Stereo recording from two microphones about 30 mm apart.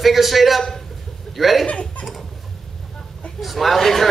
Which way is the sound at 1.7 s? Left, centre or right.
Left.